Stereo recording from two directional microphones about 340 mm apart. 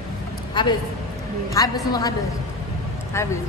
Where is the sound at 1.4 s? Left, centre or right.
Centre.